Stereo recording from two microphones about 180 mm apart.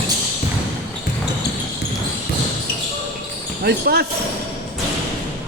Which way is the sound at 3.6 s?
60° right (ahead or behind).